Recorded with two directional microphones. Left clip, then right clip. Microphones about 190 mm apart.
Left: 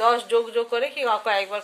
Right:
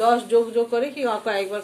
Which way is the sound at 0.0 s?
30° left (ahead or behind).